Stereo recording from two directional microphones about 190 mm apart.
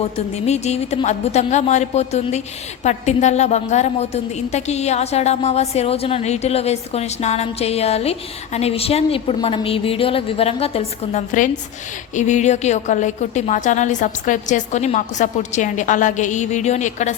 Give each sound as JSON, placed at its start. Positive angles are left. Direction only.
{"t": 0.3, "sound": "a woman's voice", "side_deg": 35}